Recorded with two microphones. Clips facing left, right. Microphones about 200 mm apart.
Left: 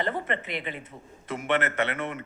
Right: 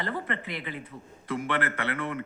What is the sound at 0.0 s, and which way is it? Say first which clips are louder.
Speech: left 3 dB; 20° left (ahead or behind).